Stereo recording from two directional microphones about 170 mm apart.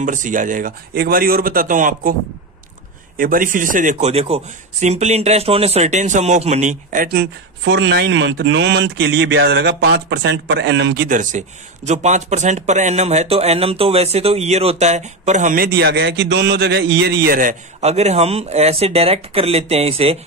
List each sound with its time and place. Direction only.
0.0 s a man's voice: 50° right (ahead or behind)
3.2 s speech: 55° right (ahead or behind); by 11.0 s 90° right
11.1 s speech: 45° right (ahead or behind)